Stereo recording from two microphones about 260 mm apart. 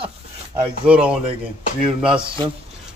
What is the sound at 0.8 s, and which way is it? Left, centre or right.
Speech, centre.